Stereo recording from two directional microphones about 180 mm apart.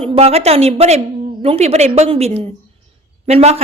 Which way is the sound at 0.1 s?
35° right (ahead or behind).